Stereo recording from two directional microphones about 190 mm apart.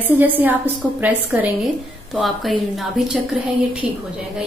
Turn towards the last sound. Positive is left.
turn(degrees=-5)  # may be behind; listen again after turning